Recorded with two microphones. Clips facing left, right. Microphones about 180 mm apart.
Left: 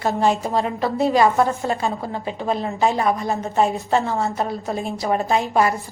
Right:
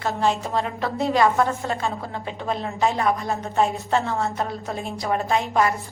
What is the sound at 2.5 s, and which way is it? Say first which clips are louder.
A woman's voice: left 3 dB; centre (ahead or behind).